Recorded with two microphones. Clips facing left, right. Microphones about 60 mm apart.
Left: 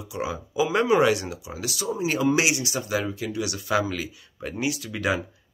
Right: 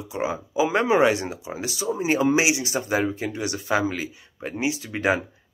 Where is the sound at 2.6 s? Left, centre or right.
Right.